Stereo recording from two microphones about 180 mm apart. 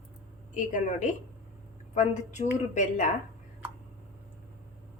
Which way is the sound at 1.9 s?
40° left (ahead or behind).